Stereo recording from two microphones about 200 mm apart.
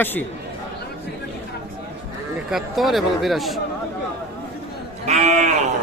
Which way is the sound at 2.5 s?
Centre (ahead or behind).